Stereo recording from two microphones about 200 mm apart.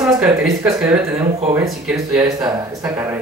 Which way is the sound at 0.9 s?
15° right (ahead or behind).